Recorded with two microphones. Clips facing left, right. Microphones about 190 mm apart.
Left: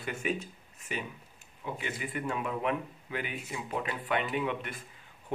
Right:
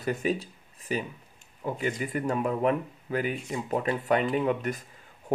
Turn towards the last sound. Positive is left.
turn(degrees=-40)  # may be behind; listen again after turning